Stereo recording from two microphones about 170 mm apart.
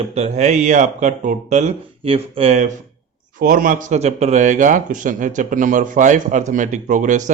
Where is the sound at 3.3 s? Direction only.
55° right (ahead or behind).